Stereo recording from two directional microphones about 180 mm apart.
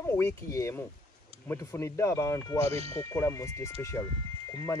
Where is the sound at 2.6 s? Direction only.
35° right (ahead or behind).